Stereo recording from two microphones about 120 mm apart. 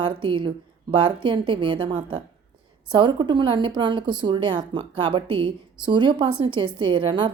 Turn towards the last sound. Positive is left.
turn(degrees=-40)  # may be behind; listen again after turning